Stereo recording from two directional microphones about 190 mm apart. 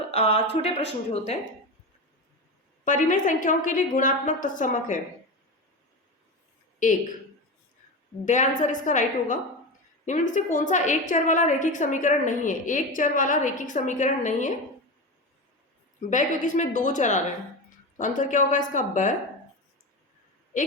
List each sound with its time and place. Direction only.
0.1 s a woman's voice: 35° left (ahead or behind)
2.8 s a woman's voice: 40° left (ahead or behind)
8.2 s a woman's voice: 40° left (ahead or behind)
16.0 s a woman's voice: 40° left (ahead or behind)